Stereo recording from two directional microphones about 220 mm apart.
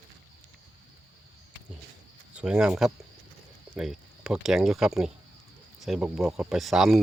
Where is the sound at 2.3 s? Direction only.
5° right (ahead or behind).